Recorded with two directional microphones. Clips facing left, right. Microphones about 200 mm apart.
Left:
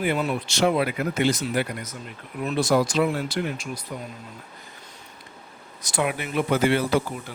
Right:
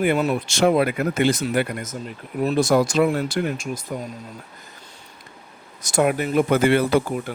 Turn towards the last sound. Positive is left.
turn(degrees=-55)  # may be behind; listen again after turning